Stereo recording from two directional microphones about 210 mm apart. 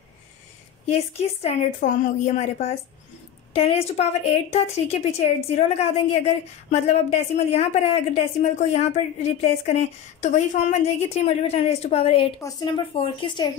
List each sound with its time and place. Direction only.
0.8 s a woman's voice: 30° left (ahead or behind)